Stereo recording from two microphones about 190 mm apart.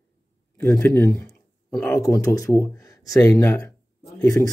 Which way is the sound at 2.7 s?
15° left (ahead or behind).